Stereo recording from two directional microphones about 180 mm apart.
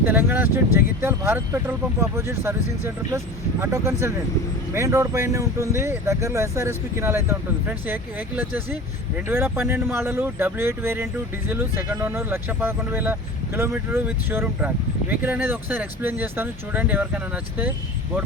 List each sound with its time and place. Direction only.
0.0 s speech: 10° right (ahead or behind)